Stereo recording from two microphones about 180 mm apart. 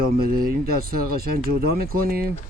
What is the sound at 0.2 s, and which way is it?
Speech, 55° right (ahead or behind).